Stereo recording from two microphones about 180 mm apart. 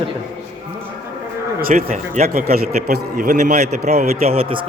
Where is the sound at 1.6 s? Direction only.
55° right (ahead or behind).